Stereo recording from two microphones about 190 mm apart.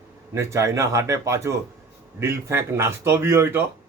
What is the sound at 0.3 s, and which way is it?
A man's voice, 15° right (ahead or behind).